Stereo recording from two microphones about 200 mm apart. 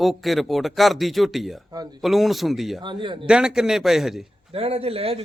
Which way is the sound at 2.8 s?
25° right (ahead or behind).